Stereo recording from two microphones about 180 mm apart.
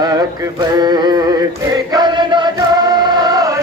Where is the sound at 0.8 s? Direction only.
20° right (ahead or behind).